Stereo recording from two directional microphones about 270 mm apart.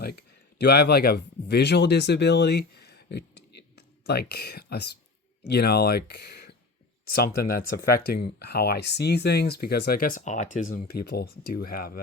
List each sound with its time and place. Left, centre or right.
0.0 s speech: left